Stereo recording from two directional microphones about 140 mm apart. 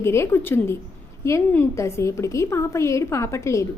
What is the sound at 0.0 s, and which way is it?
A woman's voice, 20° left (ahead or behind).